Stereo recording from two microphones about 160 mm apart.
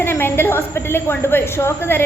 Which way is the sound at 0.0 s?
15° left (ahead or behind).